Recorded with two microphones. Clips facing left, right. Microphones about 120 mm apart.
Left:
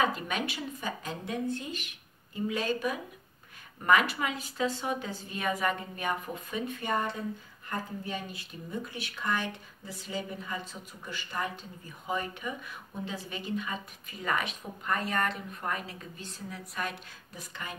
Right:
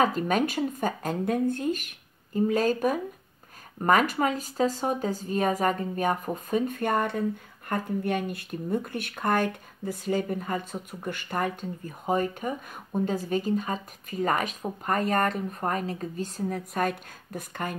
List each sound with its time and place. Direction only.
0.0 s a woman's voice: 45° right (ahead or behind)